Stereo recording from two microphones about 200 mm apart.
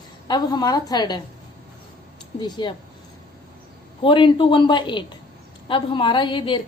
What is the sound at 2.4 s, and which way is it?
Speech, 25° left (ahead or behind).